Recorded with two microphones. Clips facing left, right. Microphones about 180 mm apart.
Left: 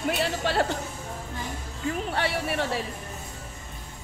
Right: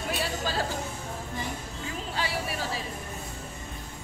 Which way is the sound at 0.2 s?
65° left (ahead or behind).